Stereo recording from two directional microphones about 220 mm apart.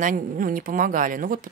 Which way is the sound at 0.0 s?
35° right (ahead or behind).